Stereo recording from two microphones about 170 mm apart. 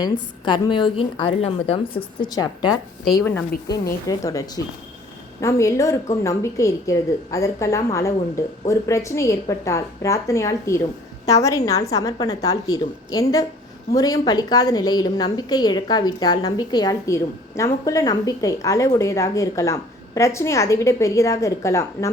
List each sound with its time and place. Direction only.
0.0 s a woman's voice: 25° left (ahead or behind)
3.2 s a woman's voice: 15° left (ahead or behind)